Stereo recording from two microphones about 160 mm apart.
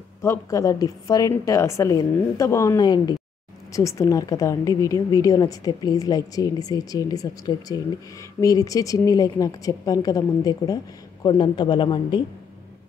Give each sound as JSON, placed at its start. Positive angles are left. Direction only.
{"t": 0.2, "sound": "a woman's voice", "side_deg": 20}